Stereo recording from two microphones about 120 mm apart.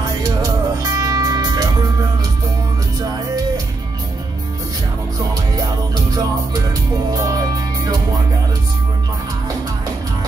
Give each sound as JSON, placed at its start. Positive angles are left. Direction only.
{"t": 0.0, "sound": "music", "side_deg": -30}
{"t": 7.2, "sound": "music", "side_deg": -30}